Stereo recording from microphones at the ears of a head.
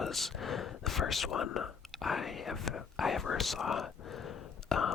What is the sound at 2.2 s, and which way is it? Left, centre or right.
Whispering, left.